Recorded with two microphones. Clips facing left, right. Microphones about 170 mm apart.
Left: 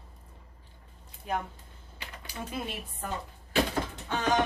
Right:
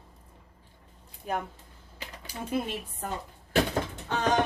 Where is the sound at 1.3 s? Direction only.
45° right (ahead or behind).